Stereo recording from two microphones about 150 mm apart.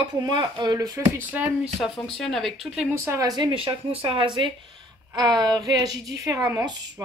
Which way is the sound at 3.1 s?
25° right (ahead or behind).